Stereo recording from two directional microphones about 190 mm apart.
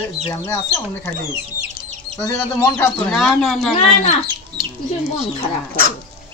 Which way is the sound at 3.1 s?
Centre (ahead or behind).